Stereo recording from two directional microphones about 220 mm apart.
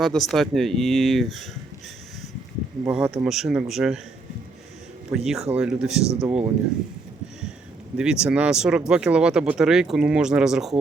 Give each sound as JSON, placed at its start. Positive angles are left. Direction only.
{"t": 0.0, "sound": "speech", "side_deg": 0}
{"t": 2.8, "sound": "speech", "side_deg": -5}
{"t": 5.1, "sound": "speech", "side_deg": 0}
{"t": 7.9, "sound": "speech", "side_deg": -5}